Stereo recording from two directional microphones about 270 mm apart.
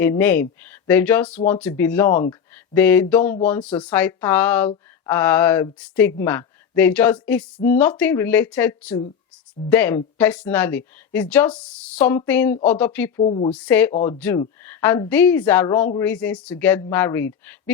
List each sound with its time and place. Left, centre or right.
0.0 s speech: centre
13.2 s a woman's voice: centre
13.5 s speech: centre